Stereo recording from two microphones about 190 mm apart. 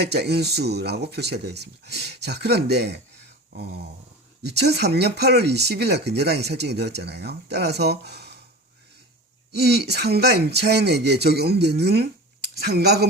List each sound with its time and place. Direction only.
0.1 s speech: 60° right (ahead or behind)
9.5 s speech: 60° right (ahead or behind)